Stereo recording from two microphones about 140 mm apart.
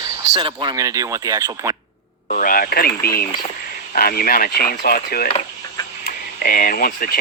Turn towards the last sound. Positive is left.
turn(degrees=90)